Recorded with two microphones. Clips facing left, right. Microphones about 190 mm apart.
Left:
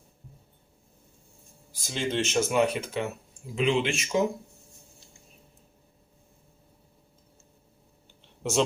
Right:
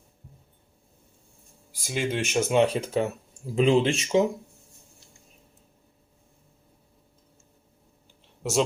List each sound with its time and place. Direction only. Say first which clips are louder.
1.7 s speech: right 1 dB; 10° right (ahead or behind)
2.5 s speech: right 3 dB; 30° right (ahead or behind)
8.2 s typing: right 1 dB; 5° right (ahead or behind)